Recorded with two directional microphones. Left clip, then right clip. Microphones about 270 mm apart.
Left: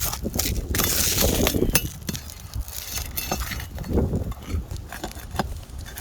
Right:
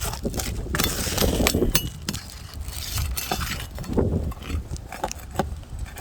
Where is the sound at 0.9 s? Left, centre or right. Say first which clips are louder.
Left 2 dB; left.